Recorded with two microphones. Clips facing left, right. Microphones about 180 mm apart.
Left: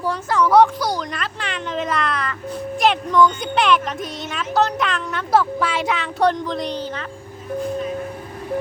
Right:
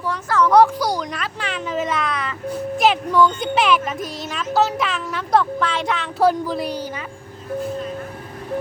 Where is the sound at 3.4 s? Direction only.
5° right (ahead or behind).